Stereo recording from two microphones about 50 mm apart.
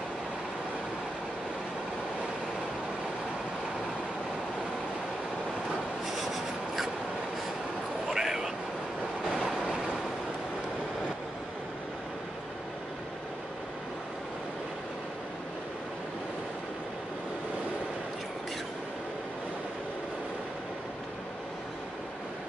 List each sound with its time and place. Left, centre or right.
6.0 s writing: centre
8.1 s a sound: centre
9.3 s train: centre